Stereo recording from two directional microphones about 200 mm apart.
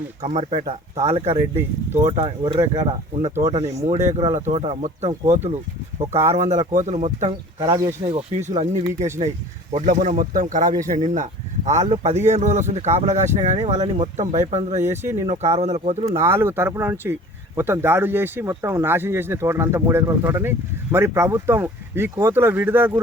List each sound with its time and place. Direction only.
0.2 s speech: 35° right (ahead or behind)
16.0 s speech: 15° right (ahead or behind)